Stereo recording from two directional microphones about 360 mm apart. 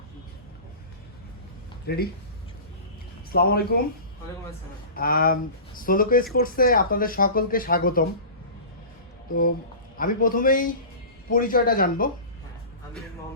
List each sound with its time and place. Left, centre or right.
1.9 s speech: left
3.3 s speech: left
4.9 s speech: left
10.0 s speech: left